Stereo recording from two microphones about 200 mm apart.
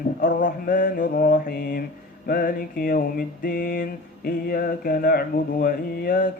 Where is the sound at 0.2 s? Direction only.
45° left (ahead or behind).